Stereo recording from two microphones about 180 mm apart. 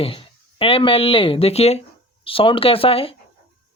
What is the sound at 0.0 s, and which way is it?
Speech, 30° left (ahead or behind).